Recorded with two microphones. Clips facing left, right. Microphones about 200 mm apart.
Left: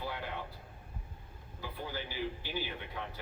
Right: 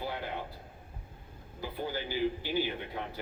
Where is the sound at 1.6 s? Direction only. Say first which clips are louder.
Right 5 dB; 30° right (ahead or behind).